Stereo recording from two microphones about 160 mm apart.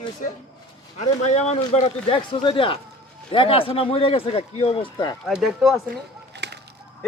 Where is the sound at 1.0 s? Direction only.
45° left (ahead or behind).